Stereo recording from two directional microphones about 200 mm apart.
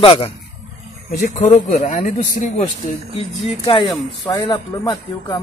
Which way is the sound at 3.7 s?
20° left (ahead or behind).